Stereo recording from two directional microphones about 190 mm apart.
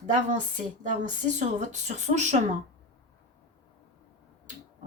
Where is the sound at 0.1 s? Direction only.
40° right (ahead or behind).